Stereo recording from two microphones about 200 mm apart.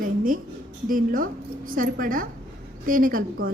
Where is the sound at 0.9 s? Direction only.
45° right (ahead or behind).